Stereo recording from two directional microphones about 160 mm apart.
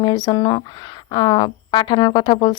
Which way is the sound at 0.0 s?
25° left (ahead or behind).